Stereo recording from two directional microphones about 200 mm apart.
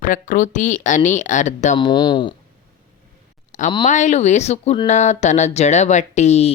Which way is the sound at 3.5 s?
40° left (ahead or behind).